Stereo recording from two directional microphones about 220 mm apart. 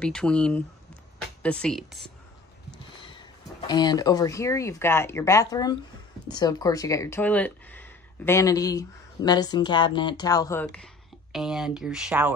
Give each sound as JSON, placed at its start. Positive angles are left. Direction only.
{"t": 0.0, "sound": "speech", "side_deg": 5}
{"t": 3.0, "sound": "speech", "side_deg": 20}